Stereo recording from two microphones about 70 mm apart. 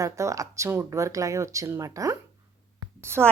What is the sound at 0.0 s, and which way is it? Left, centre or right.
Speech, right.